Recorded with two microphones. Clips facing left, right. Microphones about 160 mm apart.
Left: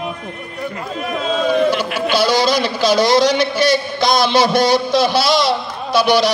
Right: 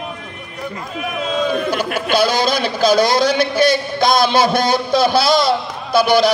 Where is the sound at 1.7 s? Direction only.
50° right (ahead or behind).